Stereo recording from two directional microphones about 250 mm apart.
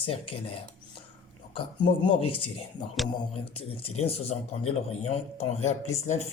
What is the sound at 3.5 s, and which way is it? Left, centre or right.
Speech, left.